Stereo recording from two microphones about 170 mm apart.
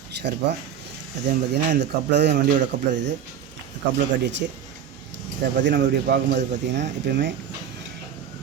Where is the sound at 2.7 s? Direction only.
45° right (ahead or behind).